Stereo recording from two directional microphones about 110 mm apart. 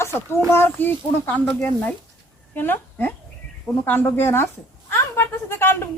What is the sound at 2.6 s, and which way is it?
A woman's voice, 20° left (ahead or behind).